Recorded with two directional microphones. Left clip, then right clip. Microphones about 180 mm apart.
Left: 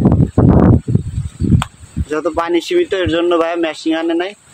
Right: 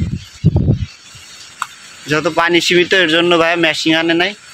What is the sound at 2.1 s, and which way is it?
Speech, 20° left (ahead or behind).